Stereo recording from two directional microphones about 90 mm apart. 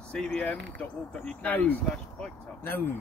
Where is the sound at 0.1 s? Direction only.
10° left (ahead or behind).